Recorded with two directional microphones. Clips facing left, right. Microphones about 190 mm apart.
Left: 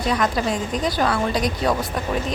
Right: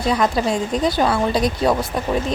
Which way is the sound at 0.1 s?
25° right (ahead or behind).